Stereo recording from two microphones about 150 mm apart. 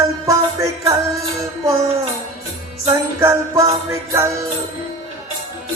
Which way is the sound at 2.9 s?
20° right (ahead or behind).